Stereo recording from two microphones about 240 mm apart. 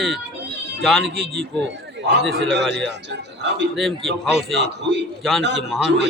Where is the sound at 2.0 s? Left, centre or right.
Right.